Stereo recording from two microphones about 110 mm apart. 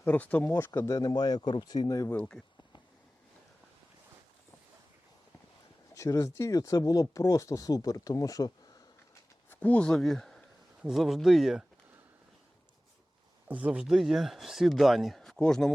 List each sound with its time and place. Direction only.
0.0 s speech: 15° left (ahead or behind); by 2.0 s 35° left (ahead or behind)
2.0 s speech: 10° left (ahead or behind)
5.9 s speech: 30° left (ahead or behind)
9.5 s speech: 15° left (ahead or behind); by 11.6 s centre (ahead or behind)
13.5 s speech: 10° right (ahead or behind); by 15.7 s 5° left (ahead or behind)